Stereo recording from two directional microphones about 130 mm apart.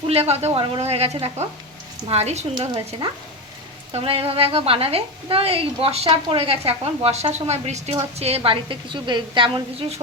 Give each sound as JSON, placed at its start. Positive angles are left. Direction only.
{"t": 0.1, "sound": "a woman's voice", "side_deg": -50}
{"t": 2.6, "sound": "a woman's voice", "side_deg": -35}
{"t": 3.9, "sound": "a woman's voice", "side_deg": -45}
{"t": 8.2, "sound": "a woman's voice", "side_deg": -45}